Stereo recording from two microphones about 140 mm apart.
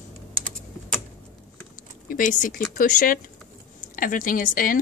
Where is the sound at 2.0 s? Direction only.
70° left (ahead or behind).